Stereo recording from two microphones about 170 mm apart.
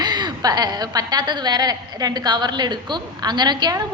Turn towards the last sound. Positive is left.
turn(degrees=-25)  # may be behind; listen again after turning